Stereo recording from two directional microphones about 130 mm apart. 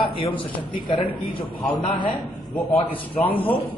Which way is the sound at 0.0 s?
40° left (ahead or behind).